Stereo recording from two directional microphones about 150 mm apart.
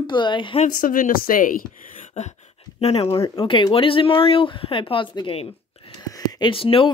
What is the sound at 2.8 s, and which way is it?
Speech, 40° left (ahead or behind).